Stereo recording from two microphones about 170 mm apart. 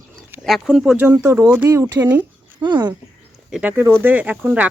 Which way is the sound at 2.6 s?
25° right (ahead or behind).